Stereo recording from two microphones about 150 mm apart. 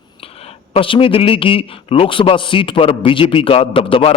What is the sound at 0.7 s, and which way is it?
A man's voice, 35° left (ahead or behind).